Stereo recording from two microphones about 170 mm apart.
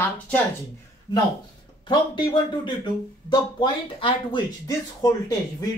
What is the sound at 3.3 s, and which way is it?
Speech, 30° left (ahead or behind).